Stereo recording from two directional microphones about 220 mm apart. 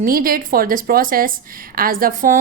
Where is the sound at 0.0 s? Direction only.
40° right (ahead or behind).